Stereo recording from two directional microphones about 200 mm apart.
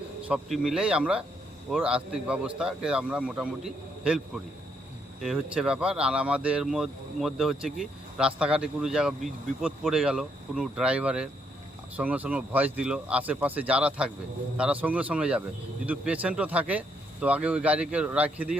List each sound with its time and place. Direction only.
0.3 s speech: centre (ahead or behind)
5.2 s speech: 5° right (ahead or behind)